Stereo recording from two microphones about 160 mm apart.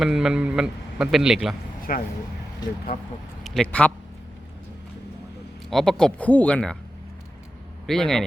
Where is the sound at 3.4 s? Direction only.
5° left (ahead or behind).